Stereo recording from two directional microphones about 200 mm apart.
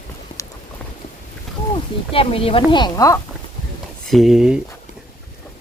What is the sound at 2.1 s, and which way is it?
A woman's voice, 30° left (ahead or behind).